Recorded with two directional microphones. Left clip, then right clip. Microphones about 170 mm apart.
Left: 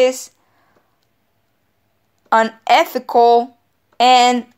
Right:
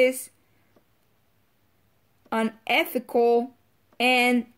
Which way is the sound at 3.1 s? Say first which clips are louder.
Left 10 dB; 40° right (ahead or behind).